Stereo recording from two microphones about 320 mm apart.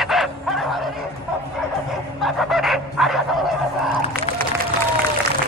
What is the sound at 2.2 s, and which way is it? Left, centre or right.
Dog, centre.